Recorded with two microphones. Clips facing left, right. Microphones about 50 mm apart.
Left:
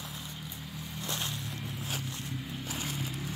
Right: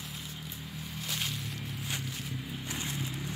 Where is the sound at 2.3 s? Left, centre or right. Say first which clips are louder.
Even; centre.